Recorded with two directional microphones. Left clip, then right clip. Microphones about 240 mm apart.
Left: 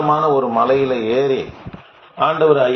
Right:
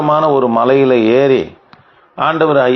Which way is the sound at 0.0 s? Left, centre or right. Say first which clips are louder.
Right 4 dB; right.